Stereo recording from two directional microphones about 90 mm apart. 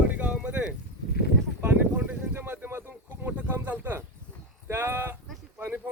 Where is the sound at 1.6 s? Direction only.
20° right (ahead or behind).